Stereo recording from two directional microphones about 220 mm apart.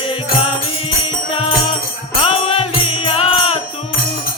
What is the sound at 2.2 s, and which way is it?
Music, 25° left (ahead or behind).